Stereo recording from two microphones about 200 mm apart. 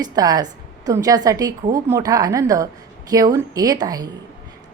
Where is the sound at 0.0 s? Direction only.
20° right (ahead or behind).